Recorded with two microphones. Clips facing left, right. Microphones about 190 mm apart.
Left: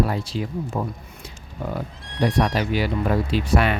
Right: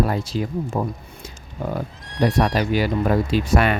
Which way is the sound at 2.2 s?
40° right (ahead or behind).